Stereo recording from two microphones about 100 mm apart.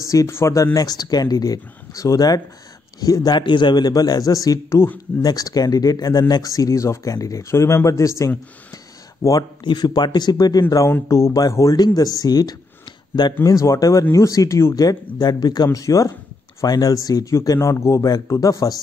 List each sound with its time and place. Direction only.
0.0 s speech: 30° left (ahead or behind)
0.7 s speech: 40° left (ahead or behind)
5.2 s speech: 40° left (ahead or behind)
9.6 s speech: 50° left (ahead or behind); by 18.8 s 35° left (ahead or behind)